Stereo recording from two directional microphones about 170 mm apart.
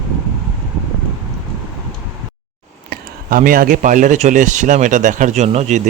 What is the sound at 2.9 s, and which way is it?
Speech, 55° right (ahead or behind).